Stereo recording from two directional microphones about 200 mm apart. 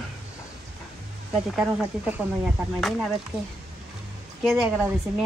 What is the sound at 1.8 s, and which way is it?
Speech, 10° right (ahead or behind).